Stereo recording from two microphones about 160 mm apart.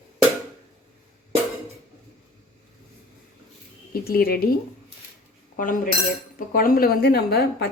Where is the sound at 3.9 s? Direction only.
70° left (ahead or behind).